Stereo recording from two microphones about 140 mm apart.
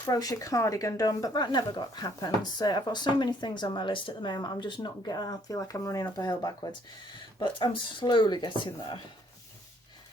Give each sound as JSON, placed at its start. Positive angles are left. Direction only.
{"t": 0.0, "sound": "speech", "side_deg": 25}